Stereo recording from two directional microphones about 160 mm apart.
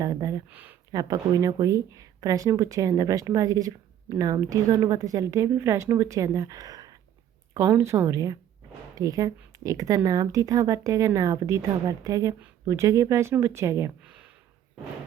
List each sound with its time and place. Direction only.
0.0 s speech: 20° right (ahead or behind)
0.5 s speech: 10° right (ahead or behind)
0.9 s speech: 25° right (ahead or behind)